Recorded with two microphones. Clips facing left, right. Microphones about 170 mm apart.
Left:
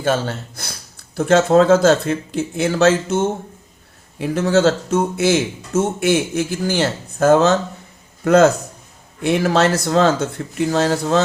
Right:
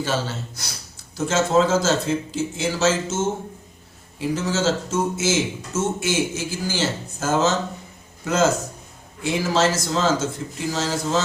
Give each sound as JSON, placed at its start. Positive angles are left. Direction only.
{"t": 0.0, "sound": "a man's voice", "side_deg": 55}